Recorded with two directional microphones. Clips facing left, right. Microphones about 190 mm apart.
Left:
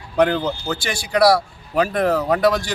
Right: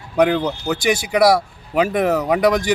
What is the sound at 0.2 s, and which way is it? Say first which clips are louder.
A man's voice: right 1 dB; 10° right (ahead or behind).